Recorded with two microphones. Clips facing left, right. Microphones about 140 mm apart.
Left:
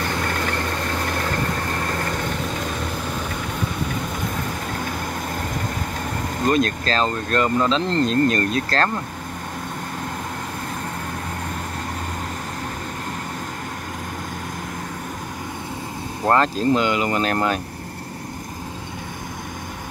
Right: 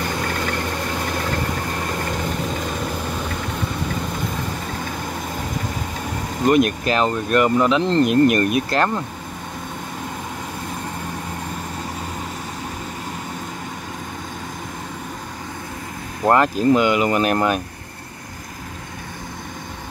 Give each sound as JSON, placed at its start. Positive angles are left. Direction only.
{"t": 2.0, "sound": "vehicle", "side_deg": -10}
{"t": 6.4, "sound": "speech", "side_deg": -15}
{"t": 16.3, "sound": "speech", "side_deg": -15}